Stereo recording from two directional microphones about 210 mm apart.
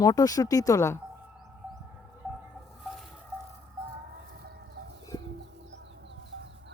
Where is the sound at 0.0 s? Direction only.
15° left (ahead or behind).